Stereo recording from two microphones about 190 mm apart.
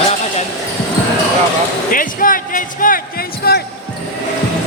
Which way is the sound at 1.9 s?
45° left (ahead or behind).